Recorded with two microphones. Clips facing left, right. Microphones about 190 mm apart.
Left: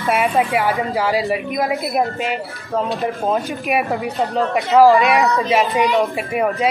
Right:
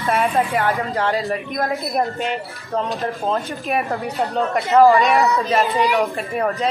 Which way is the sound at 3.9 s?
Centre (ahead or behind).